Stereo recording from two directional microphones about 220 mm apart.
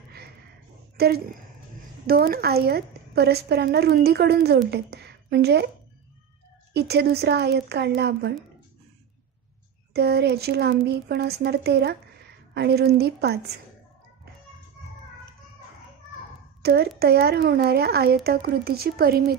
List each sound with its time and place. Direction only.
0.9 s a woman's voice: 45° right (ahead or behind)
6.7 s a woman's voice: 50° right (ahead or behind)
9.9 s a woman's voice: 45° right (ahead or behind)
16.6 s a child's voice: 45° right (ahead or behind)